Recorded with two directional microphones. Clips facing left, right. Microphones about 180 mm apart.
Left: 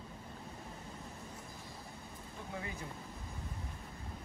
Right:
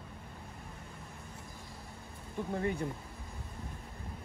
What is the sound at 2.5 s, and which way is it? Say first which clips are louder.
Speech: right 10 dB; 60° right (ahead or behind).